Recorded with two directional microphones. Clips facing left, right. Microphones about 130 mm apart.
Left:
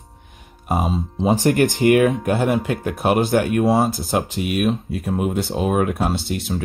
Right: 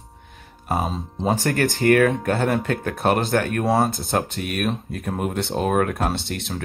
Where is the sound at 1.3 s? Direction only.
20° left (ahead or behind).